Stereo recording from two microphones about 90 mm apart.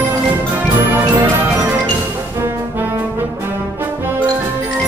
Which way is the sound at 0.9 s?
25° right (ahead or behind).